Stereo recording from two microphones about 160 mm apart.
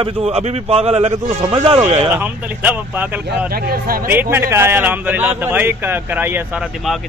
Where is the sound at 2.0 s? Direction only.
10° right (ahead or behind).